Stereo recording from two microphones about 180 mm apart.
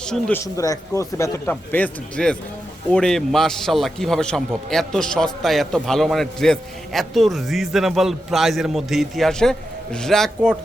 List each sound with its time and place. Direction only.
0.0 s speech: 5° left (ahead or behind)
0.4 s a man's voice: 20° left (ahead or behind); by 10.6 s centre (ahead or behind)